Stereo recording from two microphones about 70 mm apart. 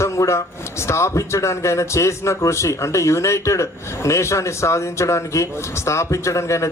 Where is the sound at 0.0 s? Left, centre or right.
Left.